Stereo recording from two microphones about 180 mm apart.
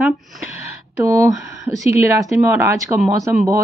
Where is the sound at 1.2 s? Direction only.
20° right (ahead or behind).